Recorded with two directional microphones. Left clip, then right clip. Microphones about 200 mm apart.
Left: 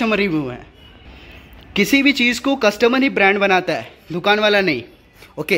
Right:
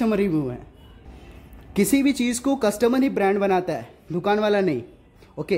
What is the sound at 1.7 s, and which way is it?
Speech, 5° right (ahead or behind).